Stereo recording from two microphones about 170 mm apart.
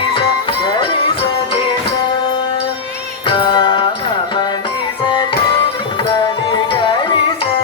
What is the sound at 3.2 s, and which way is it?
Music, 30° left (ahead or behind).